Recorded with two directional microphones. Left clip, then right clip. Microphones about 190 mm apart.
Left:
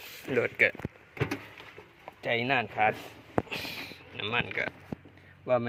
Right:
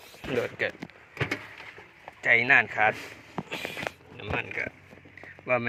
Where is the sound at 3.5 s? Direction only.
Centre (ahead or behind).